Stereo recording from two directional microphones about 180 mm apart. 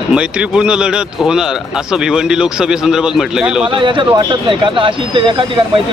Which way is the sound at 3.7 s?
30° right (ahead or behind).